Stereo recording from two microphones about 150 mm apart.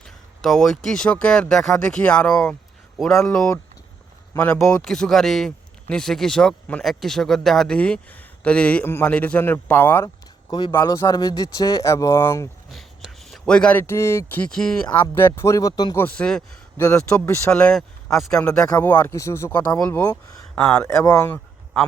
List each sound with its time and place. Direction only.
0.0 s a sound: centre (ahead or behind)
0.9 s speech: 5° left (ahead or behind)
4.4 s speech: 15° left (ahead or behind)
4.8 s speech: 5° left (ahead or behind)
10.5 s speech: 30° left (ahead or behind)
12.7 s speech: centre (ahead or behind)
15.4 s speech: 20° left (ahead or behind)
16.0 s speech: 10° left (ahead or behind)
20.8 s speech: 20° left (ahead or behind)